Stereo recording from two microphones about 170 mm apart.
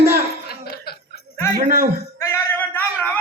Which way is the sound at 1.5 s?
55° right (ahead or behind).